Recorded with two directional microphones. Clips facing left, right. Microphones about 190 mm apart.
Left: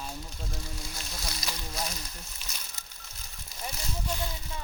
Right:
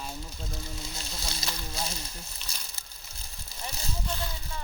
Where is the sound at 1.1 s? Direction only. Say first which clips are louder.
Even; 25° right (ahead or behind).